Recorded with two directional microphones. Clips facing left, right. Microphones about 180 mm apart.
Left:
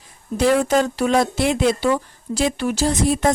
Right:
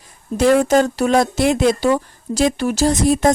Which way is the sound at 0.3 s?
45° right (ahead or behind).